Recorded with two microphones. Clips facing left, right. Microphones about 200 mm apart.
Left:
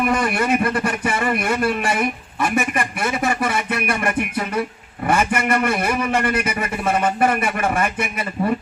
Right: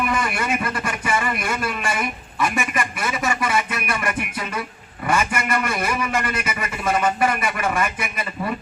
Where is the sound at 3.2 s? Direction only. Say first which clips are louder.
Even; 55° left (ahead or behind).